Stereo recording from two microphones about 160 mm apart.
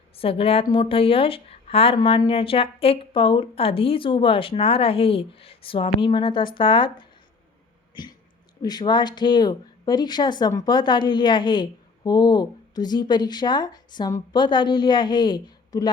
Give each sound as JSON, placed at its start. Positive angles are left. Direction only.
{"t": 0.2, "sound": "speech", "side_deg": 35}
{"t": 8.6, "sound": "speech", "side_deg": 25}